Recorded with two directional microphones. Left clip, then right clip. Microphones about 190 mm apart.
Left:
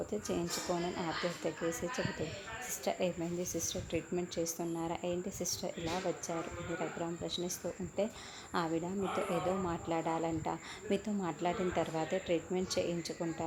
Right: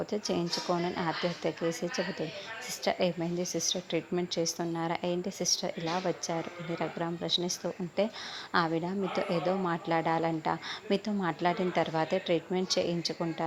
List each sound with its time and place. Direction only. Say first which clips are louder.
0.1 s speech: right 5 dB; 5° right (ahead or behind)
2.8 s speech: right 6 dB; 5° right (ahead or behind)